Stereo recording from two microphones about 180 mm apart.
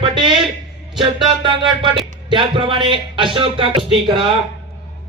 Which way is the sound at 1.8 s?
30° right (ahead or behind).